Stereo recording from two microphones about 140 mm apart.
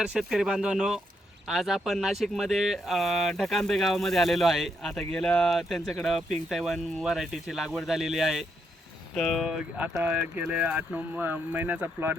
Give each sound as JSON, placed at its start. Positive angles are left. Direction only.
{"t": 0.0, "sound": "speech", "side_deg": -5}